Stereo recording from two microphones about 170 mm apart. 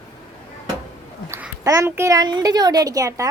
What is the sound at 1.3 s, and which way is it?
Babbling, 10° right (ahead or behind).